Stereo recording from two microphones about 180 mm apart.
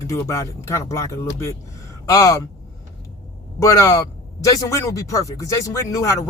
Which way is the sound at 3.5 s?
20° left (ahead or behind).